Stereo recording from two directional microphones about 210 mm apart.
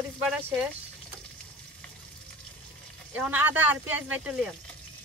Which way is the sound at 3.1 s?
10° right (ahead or behind).